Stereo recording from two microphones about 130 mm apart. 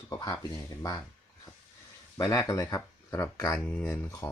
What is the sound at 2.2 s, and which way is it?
Speech, 25° left (ahead or behind).